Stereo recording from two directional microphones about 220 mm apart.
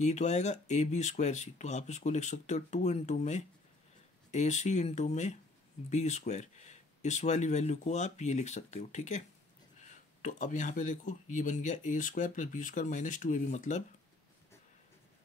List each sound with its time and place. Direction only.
0.0 s speech: 30° left (ahead or behind)